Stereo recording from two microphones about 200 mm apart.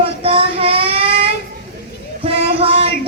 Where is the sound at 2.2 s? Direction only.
30° right (ahead or behind).